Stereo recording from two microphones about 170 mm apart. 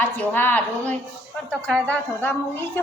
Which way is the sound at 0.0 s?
10° left (ahead or behind).